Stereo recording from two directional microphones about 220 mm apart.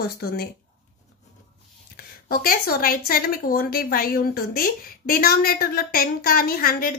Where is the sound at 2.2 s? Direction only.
40° left (ahead or behind).